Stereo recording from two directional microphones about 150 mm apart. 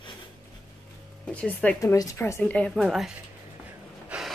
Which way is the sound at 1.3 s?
10° left (ahead or behind).